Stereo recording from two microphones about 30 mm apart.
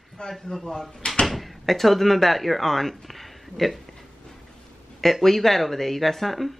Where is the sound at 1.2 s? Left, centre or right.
Centre.